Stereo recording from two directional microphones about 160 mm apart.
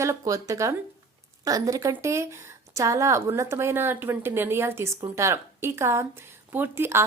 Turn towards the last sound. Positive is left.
turn(degrees=-15)  # may be behind; listen again after turning